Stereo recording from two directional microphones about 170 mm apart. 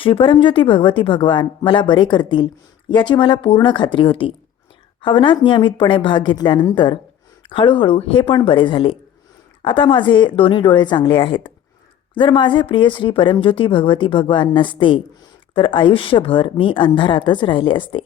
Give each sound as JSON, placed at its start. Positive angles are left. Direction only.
{"t": 0.0, "sound": "speech", "side_deg": 30}